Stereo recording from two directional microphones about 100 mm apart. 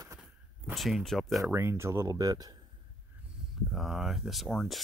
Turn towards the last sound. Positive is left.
turn(degrees=0)  # may be behind; listen again after turning